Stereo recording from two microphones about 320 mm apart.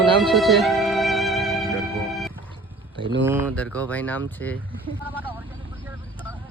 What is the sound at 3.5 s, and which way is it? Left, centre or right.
Speech, centre.